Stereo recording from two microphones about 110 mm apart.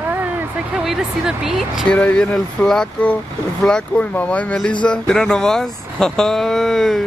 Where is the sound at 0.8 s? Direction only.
5° right (ahead or behind).